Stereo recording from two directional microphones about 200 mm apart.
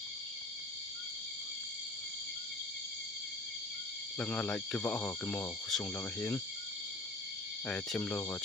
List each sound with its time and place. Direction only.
4.2 s speech: 5° left (ahead or behind)
7.7 s speech: 5° left (ahead or behind)